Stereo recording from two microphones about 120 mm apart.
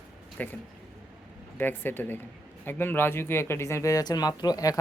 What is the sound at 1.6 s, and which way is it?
Speech, 15° left (ahead or behind).